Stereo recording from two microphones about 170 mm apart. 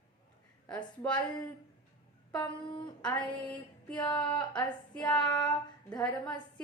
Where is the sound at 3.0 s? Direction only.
5° left (ahead or behind).